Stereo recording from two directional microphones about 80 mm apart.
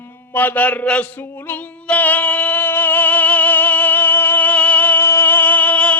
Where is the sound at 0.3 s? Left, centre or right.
Left.